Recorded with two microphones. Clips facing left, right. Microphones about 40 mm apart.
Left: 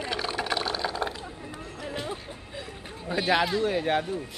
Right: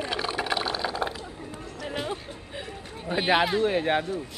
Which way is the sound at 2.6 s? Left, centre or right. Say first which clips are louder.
Right 2 dB; right.